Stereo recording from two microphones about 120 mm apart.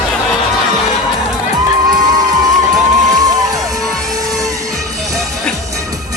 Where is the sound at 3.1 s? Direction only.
30° right (ahead or behind).